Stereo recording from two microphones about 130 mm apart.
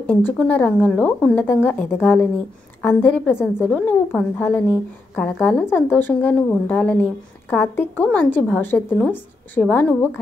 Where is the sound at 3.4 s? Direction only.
15° left (ahead or behind).